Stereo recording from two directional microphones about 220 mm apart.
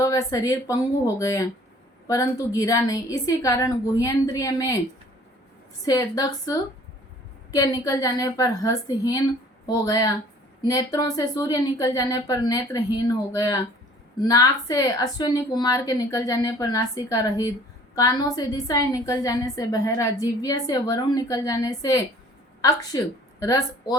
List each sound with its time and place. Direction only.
0.0 s a woman's voice: 15° left (ahead or behind)
5.8 s a woman's voice: 15° left (ahead or behind)